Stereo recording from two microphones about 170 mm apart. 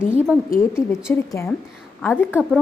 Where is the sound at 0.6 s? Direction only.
15° left (ahead or behind).